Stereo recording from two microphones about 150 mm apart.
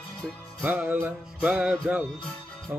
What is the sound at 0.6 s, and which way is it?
Music, 10° right (ahead or behind).